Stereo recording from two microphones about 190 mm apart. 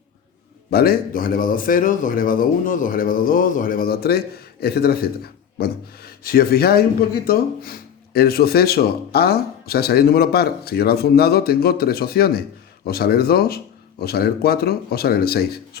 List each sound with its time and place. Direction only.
0.7 s a man's voice: 55° left (ahead or behind)